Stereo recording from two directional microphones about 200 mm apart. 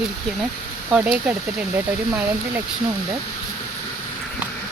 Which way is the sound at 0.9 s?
5° right (ahead or behind).